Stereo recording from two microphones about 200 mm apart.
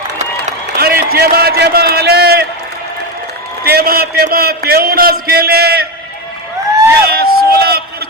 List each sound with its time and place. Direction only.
0.8 s a man's voice: 50° right (ahead or behind)
3.6 s a man's voice: 50° right (ahead or behind)
7.1 s a sound: 50° right (ahead or behind)